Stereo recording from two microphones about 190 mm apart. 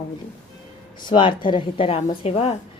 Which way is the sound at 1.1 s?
25° left (ahead or behind).